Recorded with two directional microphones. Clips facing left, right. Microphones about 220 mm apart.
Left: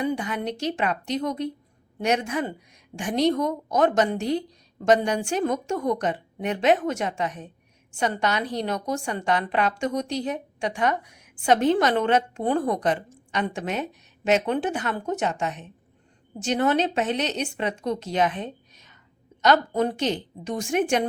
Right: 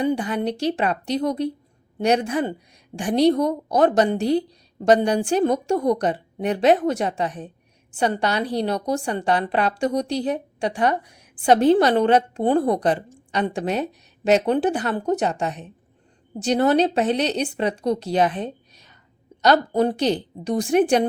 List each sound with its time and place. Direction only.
0.0 s a woman's voice: 30° right (ahead or behind)